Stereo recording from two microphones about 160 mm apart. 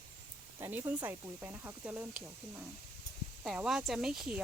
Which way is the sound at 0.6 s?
15° right (ahead or behind).